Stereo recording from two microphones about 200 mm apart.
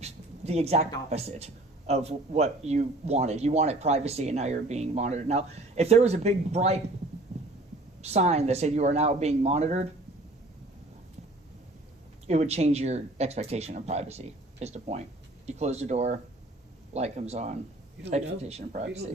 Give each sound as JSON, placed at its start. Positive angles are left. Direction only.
{"t": 0.0, "sound": "a sound", "side_deg": -30}
{"t": 1.9, "sound": "speech", "side_deg": -35}
{"t": 8.0, "sound": "speech", "side_deg": -35}
{"t": 12.3, "sound": "speech", "side_deg": -35}